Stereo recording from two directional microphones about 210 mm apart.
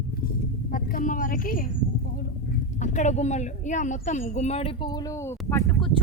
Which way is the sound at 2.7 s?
35° left (ahead or behind).